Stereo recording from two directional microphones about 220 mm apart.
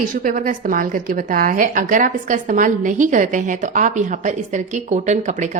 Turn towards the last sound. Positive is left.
turn(degrees=-35)  # may be behind; listen again after turning